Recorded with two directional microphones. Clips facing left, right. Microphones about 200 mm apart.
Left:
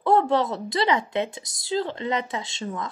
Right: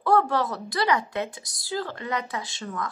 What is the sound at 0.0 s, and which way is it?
Speech, 20° left (ahead or behind).